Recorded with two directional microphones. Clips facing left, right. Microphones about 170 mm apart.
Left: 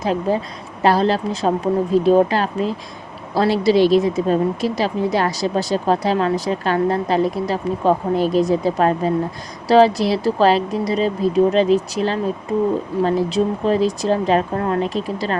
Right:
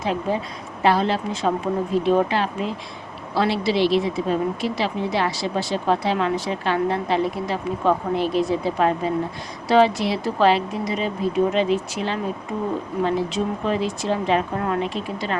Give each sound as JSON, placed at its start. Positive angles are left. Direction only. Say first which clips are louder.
{"t": 0.0, "sound": "speech", "louder": "left 4 dB", "side_deg": 40}